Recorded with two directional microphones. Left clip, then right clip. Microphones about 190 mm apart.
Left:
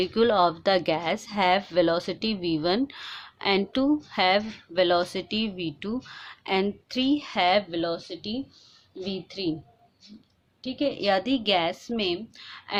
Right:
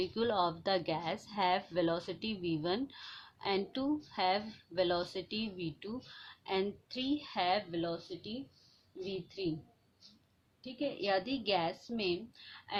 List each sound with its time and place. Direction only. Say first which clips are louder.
0.0 s a woman's voice: left 11 dB; 35° left (ahead or behind)
10.6 s speech: left 10 dB; 40° left (ahead or behind)